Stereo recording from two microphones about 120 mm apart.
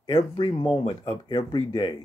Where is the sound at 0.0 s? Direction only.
35° left (ahead or behind).